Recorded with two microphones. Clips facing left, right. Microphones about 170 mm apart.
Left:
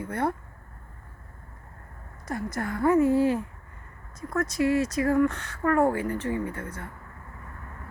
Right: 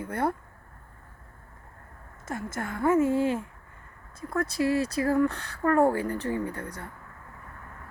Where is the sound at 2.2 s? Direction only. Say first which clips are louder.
Left 3 dB; 25° right (ahead or behind).